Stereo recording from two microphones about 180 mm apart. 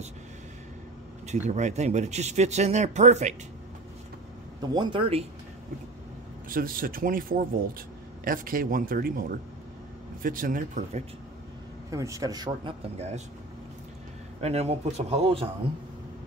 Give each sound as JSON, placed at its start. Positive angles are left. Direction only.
{"t": 1.2, "sound": "speech", "side_deg": -40}
{"t": 4.6, "sound": "a man's voice", "side_deg": -25}
{"t": 6.5, "sound": "speech", "side_deg": -50}
{"t": 10.2, "sound": "speech", "side_deg": -50}
{"t": 11.9, "sound": "a man's voice", "side_deg": -15}
{"t": 12.9, "sound": "speech", "side_deg": -35}
{"t": 14.4, "sound": "speech", "side_deg": -35}